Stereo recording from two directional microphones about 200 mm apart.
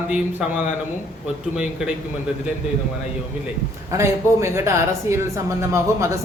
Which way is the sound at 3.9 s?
15° right (ahead or behind).